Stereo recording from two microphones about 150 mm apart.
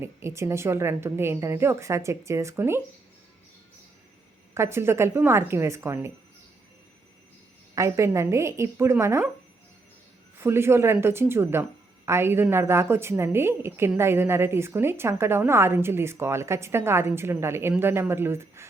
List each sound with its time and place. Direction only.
0.0 s a woman's voice: 15° right (ahead or behind)
4.5 s a woman's voice: 15° right (ahead or behind)
7.8 s a woman's voice: 20° right (ahead or behind)
10.3 s a woman's voice: 15° right (ahead or behind)